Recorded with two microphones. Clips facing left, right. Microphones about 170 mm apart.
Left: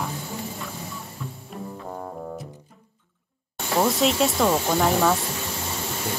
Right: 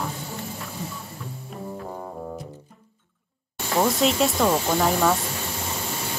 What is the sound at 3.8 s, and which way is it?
Speech, centre (ahead or behind).